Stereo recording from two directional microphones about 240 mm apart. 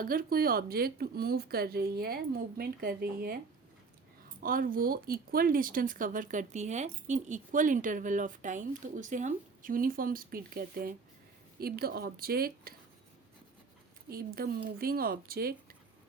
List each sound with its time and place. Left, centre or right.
0.0 s speech: right
4.4 s speech: right
14.1 s speech: right